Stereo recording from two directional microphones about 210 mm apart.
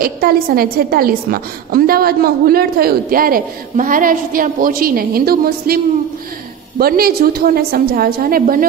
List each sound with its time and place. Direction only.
0.0 s a woman's voice: 45° right (ahead or behind)
6.8 s a woman's voice: 45° right (ahead or behind)